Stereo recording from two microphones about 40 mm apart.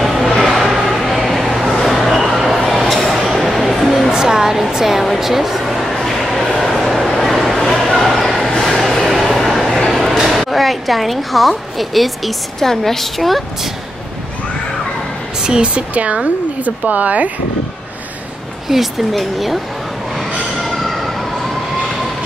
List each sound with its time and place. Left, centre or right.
0.0 s a sound: centre
4.1 s music: centre
4.7 s a sound: centre
8.1 s bow-wow: centre
8.6 s a sound: centre
12.5 s a woman's voice: centre
15.4 s speech: right
18.7 s speech: centre
20.6 s train: centre